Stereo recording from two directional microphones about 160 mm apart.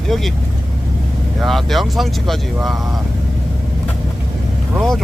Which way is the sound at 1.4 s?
Centre (ahead or behind).